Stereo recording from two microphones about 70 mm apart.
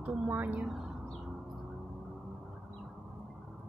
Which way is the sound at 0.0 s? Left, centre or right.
Centre.